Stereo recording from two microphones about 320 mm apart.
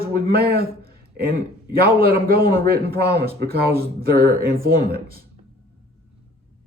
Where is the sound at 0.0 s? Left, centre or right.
Right.